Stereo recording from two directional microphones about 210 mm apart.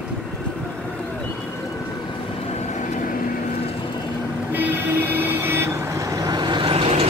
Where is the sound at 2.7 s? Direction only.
35° left (ahead or behind).